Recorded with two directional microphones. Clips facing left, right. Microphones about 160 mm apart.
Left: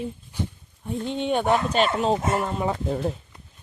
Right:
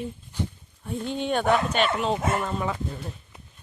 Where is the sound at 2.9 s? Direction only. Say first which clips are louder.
Left 10 dB; 90° left.